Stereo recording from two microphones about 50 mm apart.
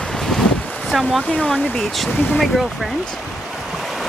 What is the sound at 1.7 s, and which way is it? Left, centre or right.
Speech, centre.